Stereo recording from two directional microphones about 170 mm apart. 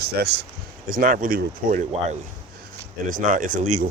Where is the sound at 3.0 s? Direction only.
50° right (ahead or behind).